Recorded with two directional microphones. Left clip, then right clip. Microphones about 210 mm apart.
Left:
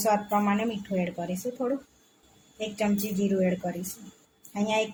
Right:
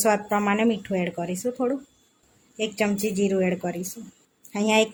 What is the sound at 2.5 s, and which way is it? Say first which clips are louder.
A woman's voice: right 4 dB; 35° right (ahead or behind).